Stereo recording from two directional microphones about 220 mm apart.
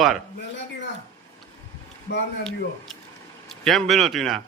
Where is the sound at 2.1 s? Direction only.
50° left (ahead or behind).